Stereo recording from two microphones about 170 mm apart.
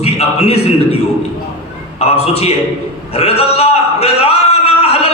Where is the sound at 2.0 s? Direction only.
35° left (ahead or behind).